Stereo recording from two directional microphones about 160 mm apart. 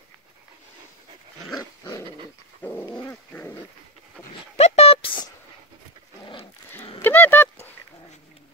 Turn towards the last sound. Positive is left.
turn(degrees=15)  # may be behind; listen again after turning